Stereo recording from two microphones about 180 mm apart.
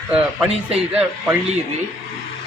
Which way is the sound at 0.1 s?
5° right (ahead or behind).